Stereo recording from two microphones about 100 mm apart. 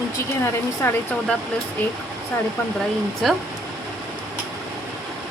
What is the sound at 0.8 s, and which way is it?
Speech, 20° left (ahead or behind).